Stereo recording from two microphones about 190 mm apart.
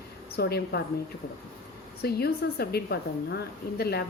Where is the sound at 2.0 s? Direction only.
55° left (ahead or behind).